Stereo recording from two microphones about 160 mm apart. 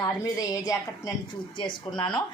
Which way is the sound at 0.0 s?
20° left (ahead or behind).